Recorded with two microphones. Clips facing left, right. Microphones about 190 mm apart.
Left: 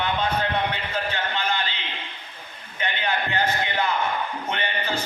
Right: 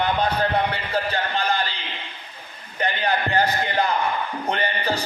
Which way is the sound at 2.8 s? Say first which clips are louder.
Right 4 dB; 40° right (ahead or behind).